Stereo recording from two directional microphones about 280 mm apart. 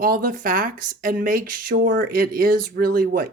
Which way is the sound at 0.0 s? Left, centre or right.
Right.